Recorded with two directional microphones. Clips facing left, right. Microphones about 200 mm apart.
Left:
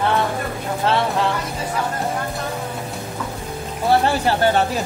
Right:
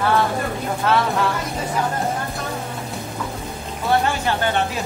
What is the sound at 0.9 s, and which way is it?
Music, 30° left (ahead or behind).